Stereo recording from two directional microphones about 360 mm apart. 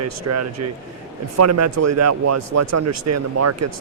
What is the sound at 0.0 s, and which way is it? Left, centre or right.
Speech, right.